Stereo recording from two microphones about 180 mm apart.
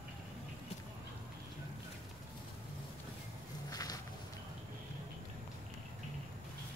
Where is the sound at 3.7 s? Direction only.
20° left (ahead or behind).